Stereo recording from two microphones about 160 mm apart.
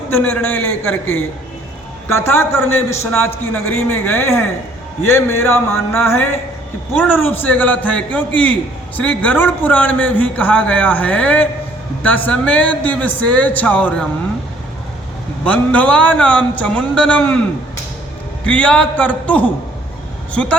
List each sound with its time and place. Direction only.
0.1 s a man's voice: 10° left (ahead or behind)
15.4 s a man's voice: 10° left (ahead or behind)
18.4 s a man's voice: 5° left (ahead or behind)